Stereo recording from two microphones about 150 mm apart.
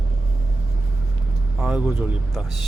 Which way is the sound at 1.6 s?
5° right (ahead or behind).